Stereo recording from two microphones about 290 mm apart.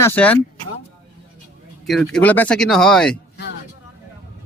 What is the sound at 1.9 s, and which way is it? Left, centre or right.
Speech, centre.